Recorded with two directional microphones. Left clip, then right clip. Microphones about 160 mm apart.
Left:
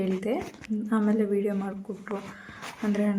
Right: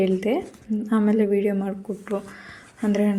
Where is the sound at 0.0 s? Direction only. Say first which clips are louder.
Right 7 dB; 20° right (ahead or behind).